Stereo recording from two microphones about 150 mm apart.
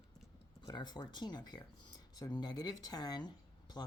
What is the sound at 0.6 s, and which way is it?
Speech, 30° left (ahead or behind).